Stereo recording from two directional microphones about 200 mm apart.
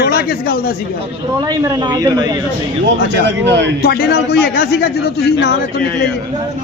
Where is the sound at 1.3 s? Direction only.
20° right (ahead or behind).